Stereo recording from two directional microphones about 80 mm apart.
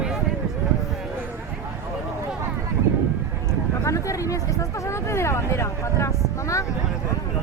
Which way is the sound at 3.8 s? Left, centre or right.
Left.